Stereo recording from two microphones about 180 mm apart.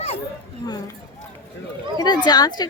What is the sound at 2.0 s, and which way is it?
Speech, 25° left (ahead or behind).